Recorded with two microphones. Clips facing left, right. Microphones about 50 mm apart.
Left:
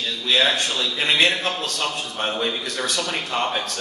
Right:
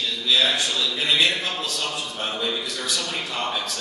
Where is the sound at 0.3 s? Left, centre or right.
Left.